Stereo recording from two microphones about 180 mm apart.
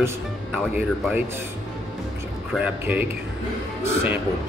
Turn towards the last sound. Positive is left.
turn(degrees=-10)  # may be behind; listen again after turning